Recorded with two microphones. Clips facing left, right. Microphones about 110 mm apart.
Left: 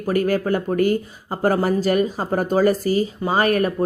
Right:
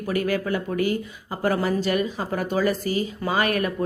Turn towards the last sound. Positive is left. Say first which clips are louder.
# left 4 dB
turn(degrees=35)  # may be behind; listen again after turning